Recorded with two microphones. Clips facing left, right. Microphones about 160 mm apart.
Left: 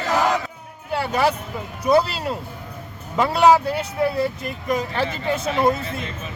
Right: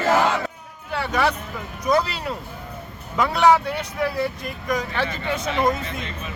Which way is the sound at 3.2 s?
30° left (ahead or behind).